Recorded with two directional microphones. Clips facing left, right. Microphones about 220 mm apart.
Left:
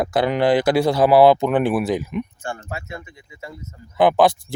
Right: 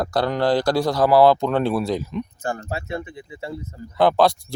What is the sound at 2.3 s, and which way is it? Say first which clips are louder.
Speech: right 3 dB; 40° right (ahead or behind).